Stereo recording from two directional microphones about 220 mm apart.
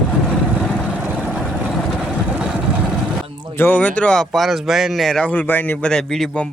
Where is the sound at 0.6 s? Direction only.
Centre (ahead or behind).